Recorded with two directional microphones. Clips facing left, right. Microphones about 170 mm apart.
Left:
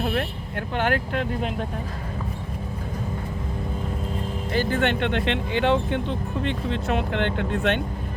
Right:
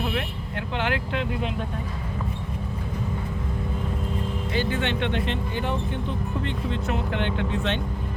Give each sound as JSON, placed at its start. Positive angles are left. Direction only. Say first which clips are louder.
{"t": 0.0, "sound": "speech", "louder": "left 3 dB", "side_deg": 45}
{"t": 4.5, "sound": "speech", "louder": "left 4 dB", "side_deg": 45}
{"t": 6.4, "sound": "speech", "louder": "left 2 dB", "side_deg": 65}